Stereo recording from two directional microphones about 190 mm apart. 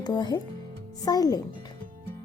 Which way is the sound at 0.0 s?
20° left (ahead or behind).